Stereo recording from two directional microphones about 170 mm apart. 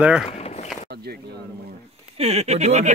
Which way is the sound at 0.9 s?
70° right (ahead or behind).